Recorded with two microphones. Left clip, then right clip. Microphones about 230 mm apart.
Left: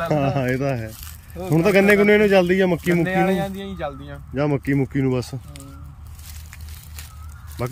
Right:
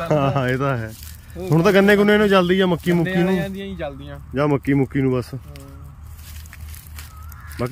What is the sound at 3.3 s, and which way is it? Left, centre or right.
Speech, centre.